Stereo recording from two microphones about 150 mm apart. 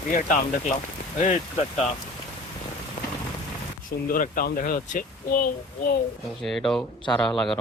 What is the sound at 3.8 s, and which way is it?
Speech, 70° left (ahead or behind).